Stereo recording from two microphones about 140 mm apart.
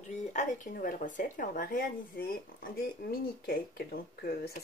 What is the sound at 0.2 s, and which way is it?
Speech, 60° left (ahead or behind).